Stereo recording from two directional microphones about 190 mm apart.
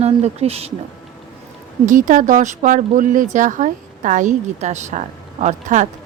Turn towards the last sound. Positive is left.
turn(degrees=-40)  # may be behind; listen again after turning